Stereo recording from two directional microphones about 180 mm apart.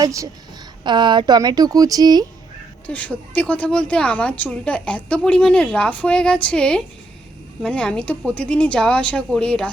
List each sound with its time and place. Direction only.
0.0 s a woman's voice: 15° right (ahead or behind)
2.8 s a woman's voice: 5° left (ahead or behind)